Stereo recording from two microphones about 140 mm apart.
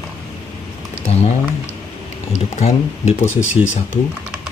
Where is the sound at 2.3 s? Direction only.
55° left (ahead or behind).